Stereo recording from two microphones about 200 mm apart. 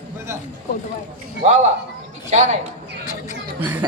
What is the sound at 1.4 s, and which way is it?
A man's voice, 35° right (ahead or behind).